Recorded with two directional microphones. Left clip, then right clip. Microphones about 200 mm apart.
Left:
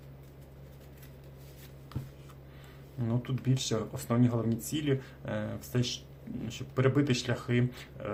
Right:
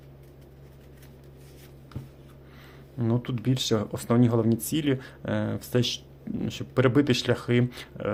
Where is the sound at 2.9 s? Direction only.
45° right (ahead or behind).